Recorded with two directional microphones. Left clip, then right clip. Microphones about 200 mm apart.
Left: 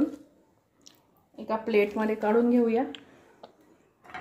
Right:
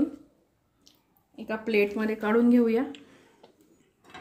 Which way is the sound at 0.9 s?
20° left (ahead or behind).